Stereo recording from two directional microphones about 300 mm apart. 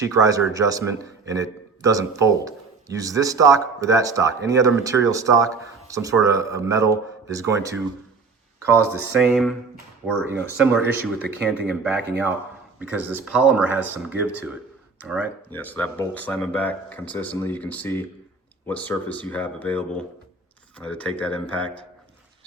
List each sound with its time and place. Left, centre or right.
0.0 s speech: centre
9.2 s speech: centre